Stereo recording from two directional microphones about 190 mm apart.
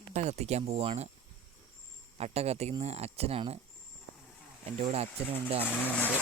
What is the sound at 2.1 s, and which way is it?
Speech, 35° right (ahead or behind).